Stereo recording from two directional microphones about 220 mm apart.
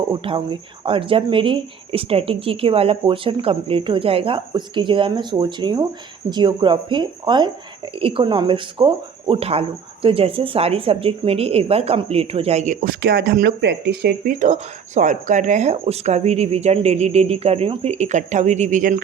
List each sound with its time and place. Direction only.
0.1 s speech: 25° right (ahead or behind); by 19.0 s 40° right (ahead or behind)